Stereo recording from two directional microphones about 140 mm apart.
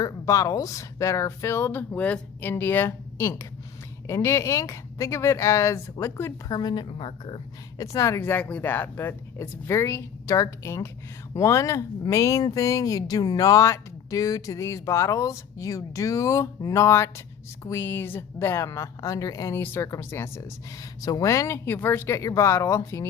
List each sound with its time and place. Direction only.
0.0 s speech: 25° left (ahead or behind)
6.5 s a woman's voice: 30° left (ahead or behind)
7.8 s speech: 20° left (ahead or behind)